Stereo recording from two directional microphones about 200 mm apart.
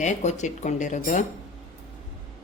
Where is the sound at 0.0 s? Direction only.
35° left (ahead or behind).